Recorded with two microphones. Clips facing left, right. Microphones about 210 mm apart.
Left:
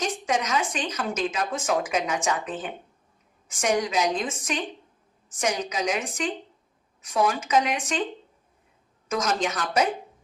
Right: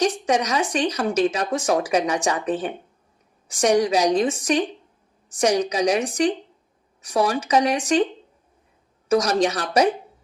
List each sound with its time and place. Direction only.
0.0 s speech: 35° right (ahead or behind)
5.4 s speech: 35° right (ahead or behind)
9.0 s speech: 35° right (ahead or behind)